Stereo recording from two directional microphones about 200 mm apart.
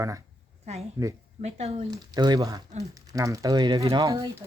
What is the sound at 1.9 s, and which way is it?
Speech, 20° right (ahead or behind).